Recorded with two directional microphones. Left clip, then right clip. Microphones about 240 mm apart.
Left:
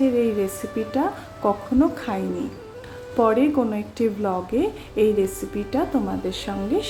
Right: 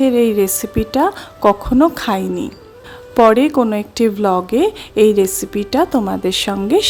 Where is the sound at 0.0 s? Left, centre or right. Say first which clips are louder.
Right 7 dB; right.